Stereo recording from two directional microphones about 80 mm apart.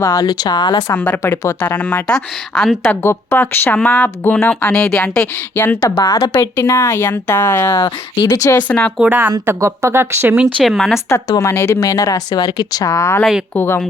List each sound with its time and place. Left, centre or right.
0.0 s speech: left
0.3 s speech: left
0.9 s speech: left
5.5 s speech: left
6.4 s speech: left
7.9 s speech: left
8.5 s speech: centre
9.0 s speech: right
9.6 s speech: right
10.4 s speech: centre
11.3 s speech: left
12.9 s speech: left
13.5 s speech: left